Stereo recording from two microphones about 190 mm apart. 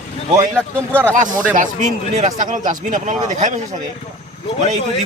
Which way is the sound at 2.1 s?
40° right (ahead or behind).